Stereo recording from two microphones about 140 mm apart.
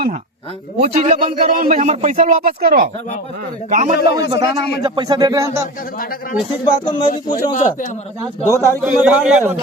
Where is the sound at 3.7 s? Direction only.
60° right (ahead or behind).